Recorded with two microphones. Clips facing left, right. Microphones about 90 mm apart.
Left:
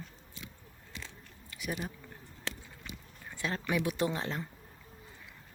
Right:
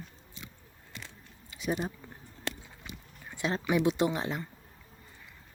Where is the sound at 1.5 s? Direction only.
25° right (ahead or behind).